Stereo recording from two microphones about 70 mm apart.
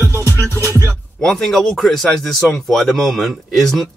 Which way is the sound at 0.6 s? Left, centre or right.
Right.